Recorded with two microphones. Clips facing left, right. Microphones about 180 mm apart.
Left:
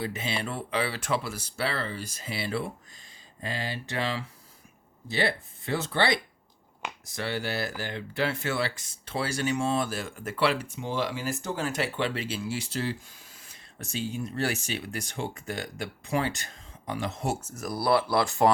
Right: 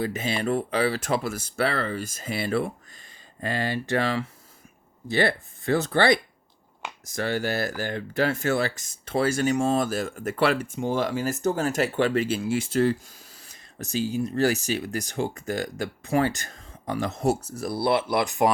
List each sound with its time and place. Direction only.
0.0 s speech: 45° right (ahead or behind); by 18.5 s 15° right (ahead or behind)